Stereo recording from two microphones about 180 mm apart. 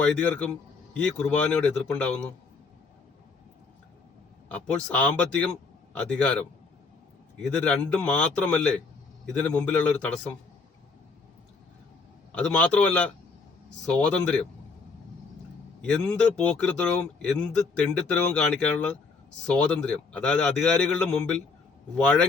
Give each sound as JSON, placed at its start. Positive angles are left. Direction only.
{"t": 0.0, "sound": "a man's voice", "side_deg": 5}
{"t": 4.4, "sound": "a man's voice", "side_deg": 5}
{"t": 7.3, "sound": "a man's voice", "side_deg": 5}
{"t": 12.3, "sound": "a man's voice", "side_deg": 5}
{"t": 15.8, "sound": "a man's voice", "side_deg": 5}